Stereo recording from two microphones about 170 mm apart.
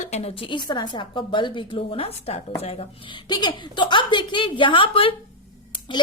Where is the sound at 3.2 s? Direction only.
25° left (ahead or behind).